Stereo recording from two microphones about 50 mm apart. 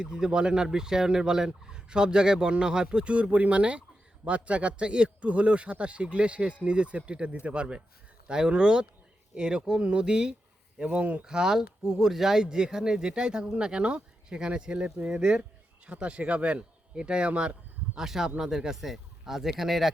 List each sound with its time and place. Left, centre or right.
0.0 s a man's voice: centre
11.3 s a man's voice: centre
17.9 s speech: centre